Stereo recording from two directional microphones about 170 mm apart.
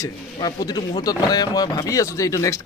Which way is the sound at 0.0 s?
20° left (ahead or behind).